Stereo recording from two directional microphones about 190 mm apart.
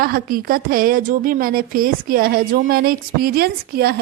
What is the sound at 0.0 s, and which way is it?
A woman's voice, 50° right (ahead or behind).